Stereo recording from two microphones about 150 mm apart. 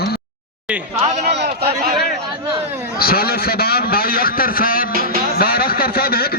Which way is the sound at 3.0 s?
90° left.